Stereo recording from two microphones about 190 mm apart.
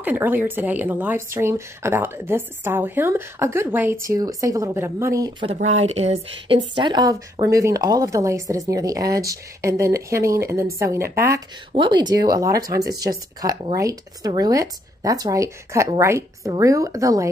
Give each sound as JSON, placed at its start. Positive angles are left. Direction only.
{"t": 0.0, "sound": "speech", "side_deg": -10}
{"t": 5.7, "sound": "speech", "side_deg": -35}